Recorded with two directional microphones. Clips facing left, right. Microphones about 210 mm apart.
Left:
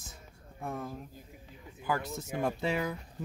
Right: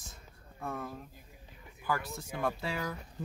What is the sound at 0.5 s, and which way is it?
Speech, 15° left (ahead or behind).